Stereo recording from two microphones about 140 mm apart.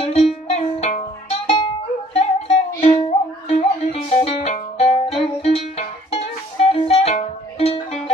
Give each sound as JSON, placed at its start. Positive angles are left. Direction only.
{"t": 0.0, "sound": "music", "side_deg": 45}
{"t": 2.8, "sound": "music", "side_deg": 35}
{"t": 3.5, "sound": "music", "side_deg": 50}